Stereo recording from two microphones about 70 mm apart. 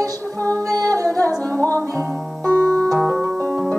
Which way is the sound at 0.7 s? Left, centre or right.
Right.